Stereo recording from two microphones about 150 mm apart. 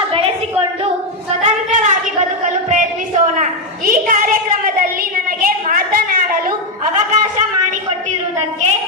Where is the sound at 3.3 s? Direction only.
60° right (ahead or behind).